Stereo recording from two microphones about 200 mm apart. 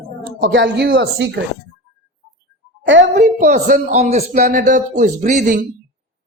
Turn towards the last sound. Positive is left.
turn(degrees=-40)  # may be behind; listen again after turning